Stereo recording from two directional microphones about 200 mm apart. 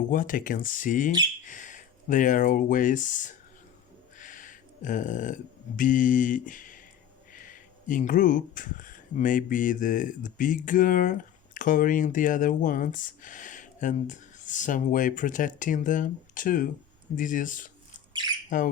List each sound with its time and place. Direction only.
0.1 s speech: 45° left (ahead or behind)
18.1 s squawk: 20° right (ahead or behind)